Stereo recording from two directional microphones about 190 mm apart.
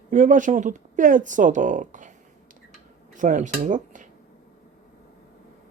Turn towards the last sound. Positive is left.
turn(degrees=-40)  # may be behind; listen again after turning